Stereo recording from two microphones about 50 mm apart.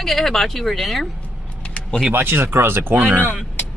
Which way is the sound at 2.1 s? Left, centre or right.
Right.